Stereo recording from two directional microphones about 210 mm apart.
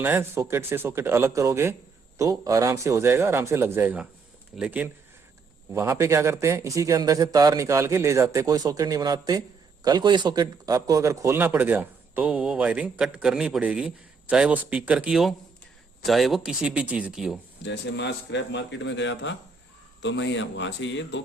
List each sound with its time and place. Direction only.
0.0 s a man's voice: 10° right (ahead or behind)
17.6 s a man's voice: 55° left (ahead or behind)